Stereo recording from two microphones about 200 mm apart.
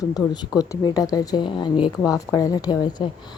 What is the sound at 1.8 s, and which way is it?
Speech, 5° right (ahead or behind).